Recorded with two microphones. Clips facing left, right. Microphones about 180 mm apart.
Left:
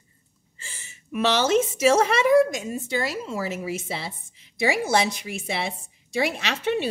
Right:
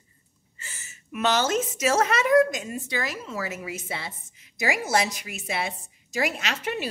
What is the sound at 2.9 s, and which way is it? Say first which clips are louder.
A woman's voice: left 5 dB; 30° left (ahead or behind).